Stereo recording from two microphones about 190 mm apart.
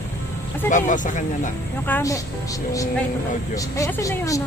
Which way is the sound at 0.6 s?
40° left (ahead or behind).